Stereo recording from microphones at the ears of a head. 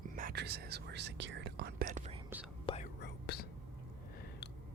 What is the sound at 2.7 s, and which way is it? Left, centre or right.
Whispering, left.